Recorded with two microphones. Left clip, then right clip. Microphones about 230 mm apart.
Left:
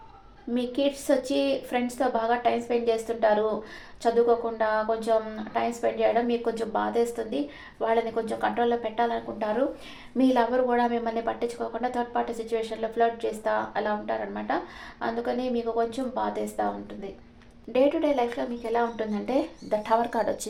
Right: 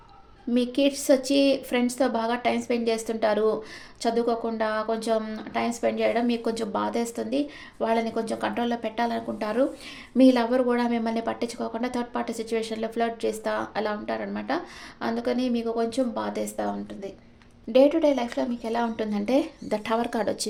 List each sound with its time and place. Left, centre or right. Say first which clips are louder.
0.5 s a woman's voice: right 3 dB; right
17.7 s a woman's voice: right 4 dB; right